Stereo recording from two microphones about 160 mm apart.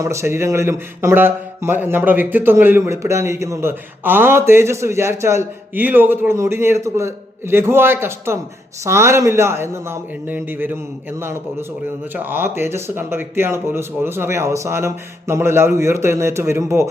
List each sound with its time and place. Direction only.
0.0 s speech: 20° right (ahead or behind)
12.1 s speech: 10° right (ahead or behind)